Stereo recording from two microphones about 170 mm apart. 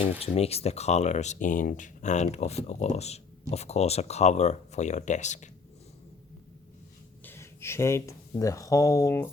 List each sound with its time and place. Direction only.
0.0 s speech: 35° left (ahead or behind)
7.3 s a sound: 15° left (ahead or behind)
8.4 s speech: 20° left (ahead or behind)